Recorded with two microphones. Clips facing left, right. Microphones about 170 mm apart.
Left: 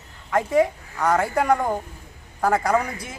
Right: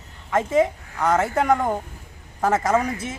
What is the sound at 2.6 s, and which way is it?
Speech, 20° right (ahead or behind).